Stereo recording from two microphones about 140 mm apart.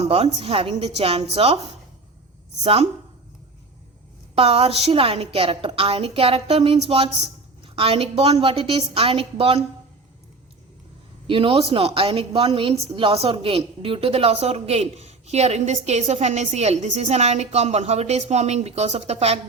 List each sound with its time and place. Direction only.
0.0 s a woman's voice: 45° right (ahead or behind)
4.4 s a woman's voice: 45° right (ahead or behind)
11.3 s a woman's voice: 40° right (ahead or behind)